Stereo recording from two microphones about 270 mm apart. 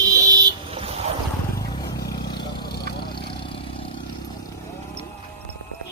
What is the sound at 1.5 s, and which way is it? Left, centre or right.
Vehicle, centre.